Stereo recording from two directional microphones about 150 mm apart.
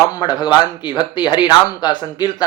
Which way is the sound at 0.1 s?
30° left (ahead or behind).